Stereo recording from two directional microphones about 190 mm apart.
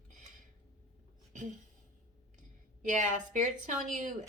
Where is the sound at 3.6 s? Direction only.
40° right (ahead or behind).